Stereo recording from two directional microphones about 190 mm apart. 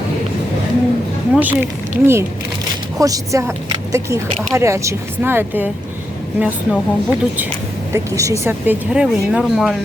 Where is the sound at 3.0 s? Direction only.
20° right (ahead or behind).